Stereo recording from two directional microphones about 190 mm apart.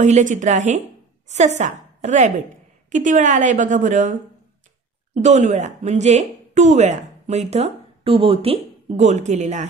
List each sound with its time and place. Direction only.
0.0 s a woman's voice: 40° right (ahead or behind)
5.2 s a woman's voice: 40° right (ahead or behind)